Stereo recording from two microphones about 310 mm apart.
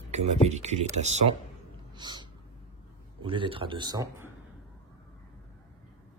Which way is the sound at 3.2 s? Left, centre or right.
Centre.